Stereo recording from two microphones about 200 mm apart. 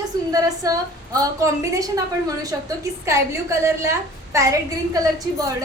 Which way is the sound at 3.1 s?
15° right (ahead or behind).